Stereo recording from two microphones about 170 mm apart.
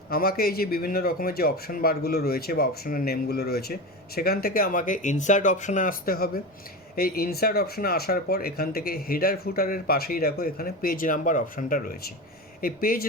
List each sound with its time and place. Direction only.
0.1 s speech: 65° left (ahead or behind)